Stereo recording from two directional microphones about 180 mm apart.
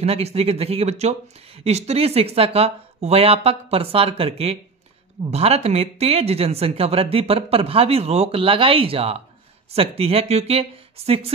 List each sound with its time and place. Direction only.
0.0 s speech: 35° right (ahead or behind)